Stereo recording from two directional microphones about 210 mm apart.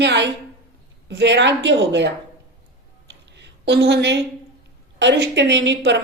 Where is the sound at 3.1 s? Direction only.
55° right (ahead or behind).